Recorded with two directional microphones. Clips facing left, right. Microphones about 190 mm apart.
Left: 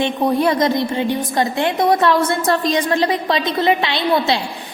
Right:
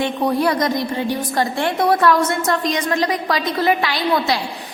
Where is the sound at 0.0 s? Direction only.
20° left (ahead or behind).